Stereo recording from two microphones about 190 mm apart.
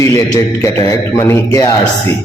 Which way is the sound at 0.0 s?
15° left (ahead or behind).